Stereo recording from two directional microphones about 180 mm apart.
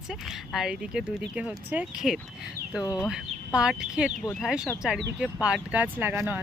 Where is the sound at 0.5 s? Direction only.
5° right (ahead or behind).